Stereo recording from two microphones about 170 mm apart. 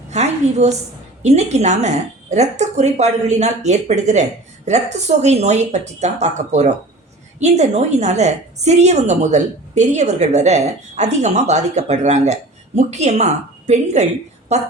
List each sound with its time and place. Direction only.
0.1 s a woman's voice: 40° right (ahead or behind)